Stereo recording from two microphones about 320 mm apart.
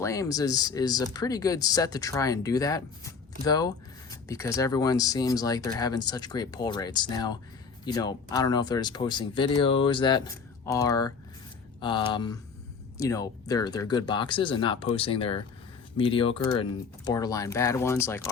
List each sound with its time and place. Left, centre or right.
0.0 s speech: centre